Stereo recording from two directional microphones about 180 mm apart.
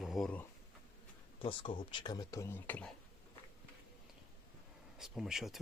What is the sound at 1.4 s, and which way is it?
Speech, 25° left (ahead or behind).